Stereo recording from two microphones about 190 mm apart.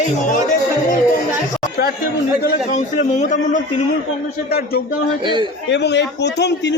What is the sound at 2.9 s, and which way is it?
Speech, 40° left (ahead or behind).